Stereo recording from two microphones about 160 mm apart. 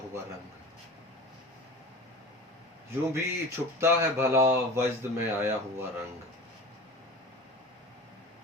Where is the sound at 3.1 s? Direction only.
15° right (ahead or behind).